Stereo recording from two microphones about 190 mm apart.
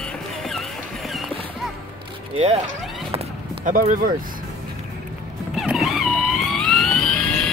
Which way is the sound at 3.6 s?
45° right (ahead or behind).